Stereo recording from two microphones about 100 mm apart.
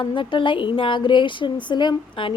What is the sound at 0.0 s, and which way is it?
A woman's voice, 55° left (ahead or behind).